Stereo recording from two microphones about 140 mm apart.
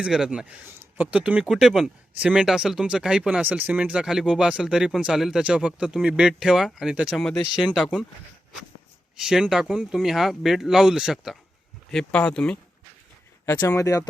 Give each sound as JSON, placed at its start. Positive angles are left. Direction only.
{"t": 0.0, "sound": "speech", "side_deg": -5}
{"t": 9.1, "sound": "speech", "side_deg": -5}
{"t": 13.6, "sound": "speech", "side_deg": 25}